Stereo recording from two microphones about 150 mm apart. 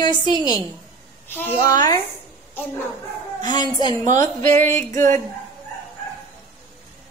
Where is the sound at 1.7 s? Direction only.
30° left (ahead or behind).